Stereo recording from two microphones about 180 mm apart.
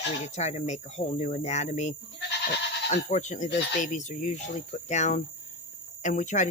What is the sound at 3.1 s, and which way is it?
Speech, 40° left (ahead or behind).